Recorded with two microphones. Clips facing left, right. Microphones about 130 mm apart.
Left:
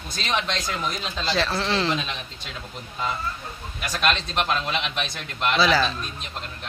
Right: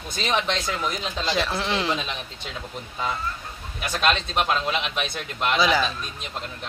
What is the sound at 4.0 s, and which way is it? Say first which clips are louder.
Speech: right 1 dB; 15° right (ahead or behind).